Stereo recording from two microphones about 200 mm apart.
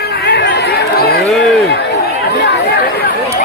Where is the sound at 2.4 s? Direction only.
55° left (ahead or behind).